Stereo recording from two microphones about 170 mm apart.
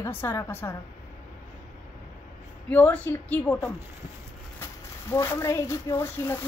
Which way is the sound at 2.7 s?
10° left (ahead or behind).